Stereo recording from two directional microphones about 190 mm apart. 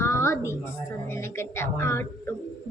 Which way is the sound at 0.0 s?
15° left (ahead or behind).